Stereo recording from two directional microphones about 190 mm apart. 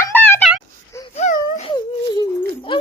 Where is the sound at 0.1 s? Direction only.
10° left (ahead or behind).